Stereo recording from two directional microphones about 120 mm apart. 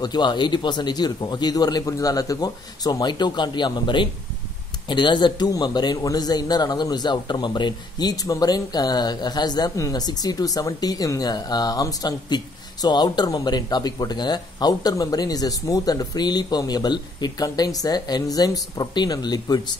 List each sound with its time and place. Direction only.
0.0 s a man's voice: 35° left (ahead or behind)